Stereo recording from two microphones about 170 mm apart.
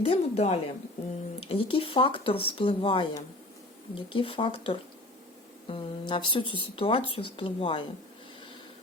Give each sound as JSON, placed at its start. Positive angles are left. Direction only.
{"t": 0.0, "sound": "speech", "side_deg": 40}